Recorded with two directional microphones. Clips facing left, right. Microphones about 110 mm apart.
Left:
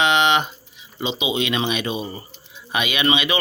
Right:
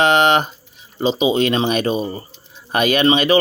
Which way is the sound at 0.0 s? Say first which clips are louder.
Right 4 dB; 40° right (ahead or behind).